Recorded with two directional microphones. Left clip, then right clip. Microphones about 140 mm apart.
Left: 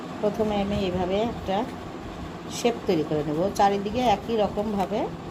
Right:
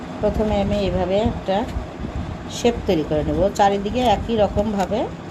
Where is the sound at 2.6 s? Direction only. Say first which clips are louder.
Right 5 dB; 20° right (ahead or behind).